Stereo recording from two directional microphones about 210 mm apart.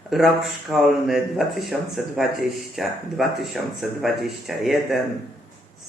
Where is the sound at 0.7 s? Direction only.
Centre (ahead or behind).